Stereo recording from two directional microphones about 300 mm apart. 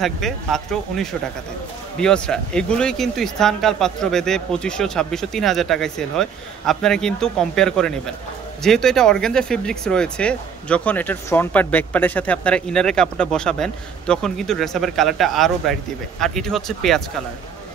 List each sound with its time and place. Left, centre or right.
0.0 s speech: centre